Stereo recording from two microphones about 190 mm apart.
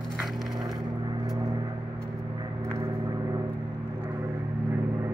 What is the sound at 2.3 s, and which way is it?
Gong, 15° right (ahead or behind).